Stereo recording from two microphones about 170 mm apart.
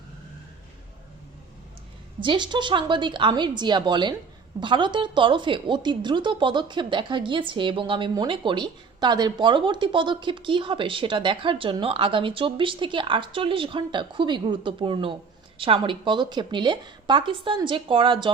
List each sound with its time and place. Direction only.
2.2 s a woman's voice: 30° right (ahead or behind)